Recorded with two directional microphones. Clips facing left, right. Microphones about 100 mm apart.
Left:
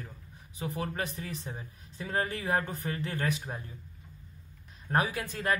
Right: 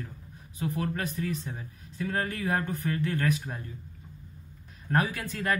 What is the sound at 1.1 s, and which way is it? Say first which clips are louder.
Speech: right 6 dB; 25° left (ahead or behind).